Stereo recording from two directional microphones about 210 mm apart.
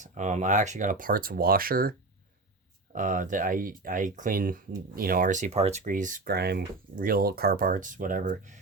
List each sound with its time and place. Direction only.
0.0 s speech: 35° right (ahead or behind)